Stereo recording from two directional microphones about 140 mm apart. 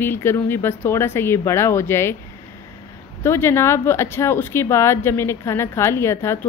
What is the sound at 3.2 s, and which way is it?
Speech, 20° left (ahead or behind).